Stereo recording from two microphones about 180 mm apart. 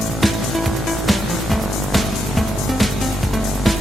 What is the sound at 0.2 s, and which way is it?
Music, centre (ahead or behind).